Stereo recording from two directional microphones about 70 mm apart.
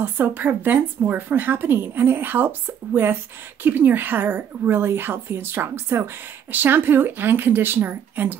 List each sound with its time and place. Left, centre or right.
0.0 s a woman's voice: right